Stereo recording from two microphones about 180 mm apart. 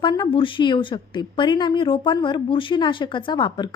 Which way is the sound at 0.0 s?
25° left (ahead or behind).